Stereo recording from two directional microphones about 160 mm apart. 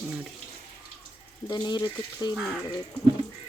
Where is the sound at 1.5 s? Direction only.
25° left (ahead or behind).